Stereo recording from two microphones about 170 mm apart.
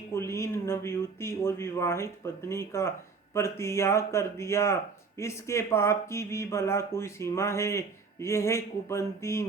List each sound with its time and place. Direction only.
0.1 s speech: 15° left (ahead or behind)